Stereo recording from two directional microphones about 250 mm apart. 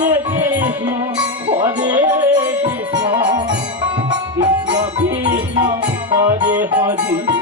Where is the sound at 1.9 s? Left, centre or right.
Centre.